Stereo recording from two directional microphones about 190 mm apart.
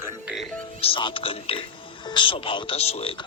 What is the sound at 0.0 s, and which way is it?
Music, 5° right (ahead or behind).